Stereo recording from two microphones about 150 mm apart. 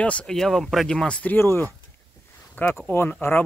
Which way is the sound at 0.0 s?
5° left (ahead or behind).